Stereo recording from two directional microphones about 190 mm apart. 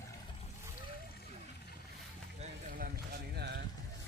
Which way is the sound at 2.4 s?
45° right (ahead or behind).